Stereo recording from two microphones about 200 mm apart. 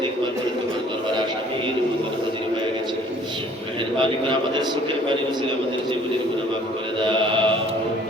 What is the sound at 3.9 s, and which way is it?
Speech, 25° right (ahead or behind).